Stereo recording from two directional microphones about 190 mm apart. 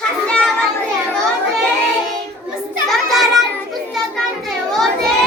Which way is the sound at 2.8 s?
Centre (ahead or behind).